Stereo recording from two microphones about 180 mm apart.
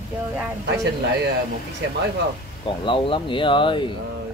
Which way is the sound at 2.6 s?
30° left (ahead or behind).